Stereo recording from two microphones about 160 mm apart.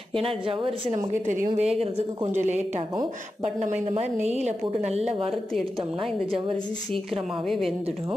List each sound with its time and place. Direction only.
0.1 s speech: 35° right (ahead or behind)
1.2 s a woman's voice: 50° right (ahead or behind)
1.8 s speech: 40° right (ahead or behind)
3.6 s a woman's voice: 45° right (ahead or behind)
7.4 s a woman's voice: centre (ahead or behind)